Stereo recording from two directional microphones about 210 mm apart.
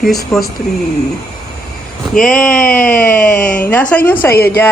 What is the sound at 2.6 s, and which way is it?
Babbling, 40° left (ahead or behind).